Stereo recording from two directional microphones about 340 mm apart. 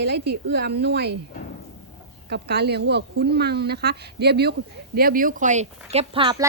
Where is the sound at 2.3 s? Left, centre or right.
Right.